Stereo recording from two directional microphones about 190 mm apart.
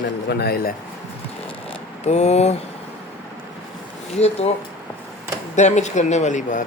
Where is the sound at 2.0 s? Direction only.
35° left (ahead or behind).